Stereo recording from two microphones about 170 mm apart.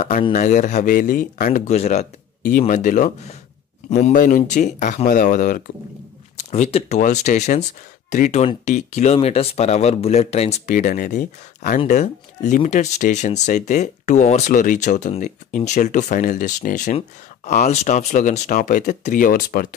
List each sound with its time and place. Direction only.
0.3 s speech: 45° left (ahead or behind)
10.7 s speech: 50° left (ahead or behind)